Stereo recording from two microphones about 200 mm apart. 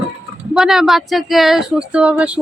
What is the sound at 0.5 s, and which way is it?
Speech, centre (ahead or behind).